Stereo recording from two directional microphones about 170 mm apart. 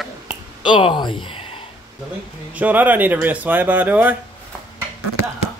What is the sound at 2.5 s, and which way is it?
Speech, 10° right (ahead or behind).